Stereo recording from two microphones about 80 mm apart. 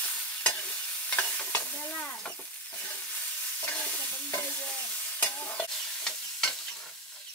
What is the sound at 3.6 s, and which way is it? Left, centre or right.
Stir, centre.